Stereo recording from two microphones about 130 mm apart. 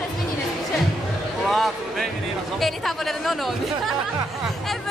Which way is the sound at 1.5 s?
Centre (ahead or behind).